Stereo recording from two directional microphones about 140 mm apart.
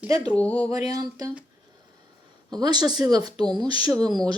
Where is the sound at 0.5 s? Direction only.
25° right (ahead or behind).